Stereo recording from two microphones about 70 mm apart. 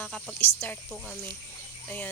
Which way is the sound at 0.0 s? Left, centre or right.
Centre.